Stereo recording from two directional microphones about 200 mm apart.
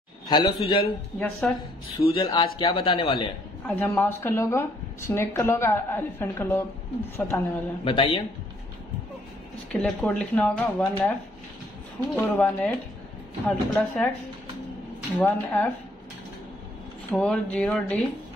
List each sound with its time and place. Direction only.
0.3 s speech: 25° left (ahead or behind)
1.4 s speech: 5° left (ahead or behind)
2.0 s speech: 25° left (ahead or behind)
3.6 s speech: 10° left (ahead or behind)
7.8 s speech: 25° left (ahead or behind)
9.7 s speech: 5° left (ahead or behind)
12.2 s speech: 10° left (ahead or behind)
15.1 s speech: 10° left (ahead or behind)
17.1 s speech: 5° left (ahead or behind)